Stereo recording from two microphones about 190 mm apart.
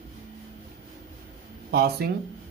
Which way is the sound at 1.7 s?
55° right (ahead or behind).